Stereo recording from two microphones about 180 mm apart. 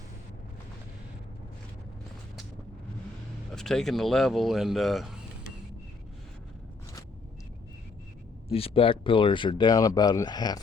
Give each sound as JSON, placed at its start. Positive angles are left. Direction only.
{"t": 3.5, "sound": "speech", "side_deg": 5}
{"t": 8.5, "sound": "speech", "side_deg": 30}